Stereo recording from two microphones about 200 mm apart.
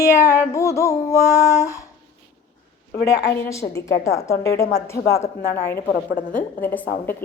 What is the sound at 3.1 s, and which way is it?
A woman's voice, 15° left (ahead or behind).